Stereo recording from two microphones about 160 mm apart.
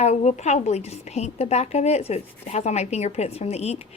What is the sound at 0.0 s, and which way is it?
A woman's voice, 45° left (ahead or behind).